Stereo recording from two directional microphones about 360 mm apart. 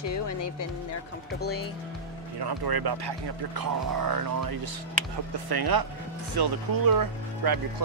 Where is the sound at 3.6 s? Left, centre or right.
Right.